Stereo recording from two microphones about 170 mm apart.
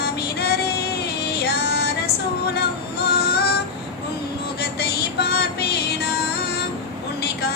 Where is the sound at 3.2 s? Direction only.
70° left (ahead or behind).